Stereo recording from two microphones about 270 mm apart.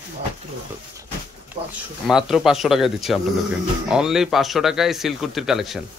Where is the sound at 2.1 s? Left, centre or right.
Centre.